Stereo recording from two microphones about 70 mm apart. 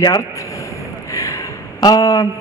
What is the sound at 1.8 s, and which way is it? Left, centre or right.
Speech, left.